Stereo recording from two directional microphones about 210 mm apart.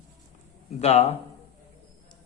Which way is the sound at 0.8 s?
30° left (ahead or behind).